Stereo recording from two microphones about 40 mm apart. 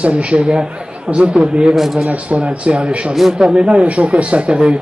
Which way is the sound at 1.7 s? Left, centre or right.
Centre.